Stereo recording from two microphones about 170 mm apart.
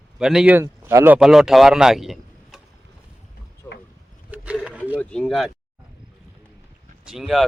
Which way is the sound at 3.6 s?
10° left (ahead or behind).